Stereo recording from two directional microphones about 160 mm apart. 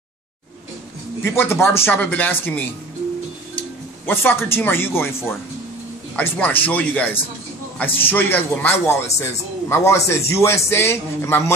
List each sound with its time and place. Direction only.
1.2 s a man's voice: 15° left (ahead or behind)
4.0 s a man's voice: 15° left (ahead or behind)
6.1 s a man's voice: 10° left (ahead or behind)